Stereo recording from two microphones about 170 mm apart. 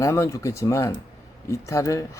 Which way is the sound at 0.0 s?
15° left (ahead or behind).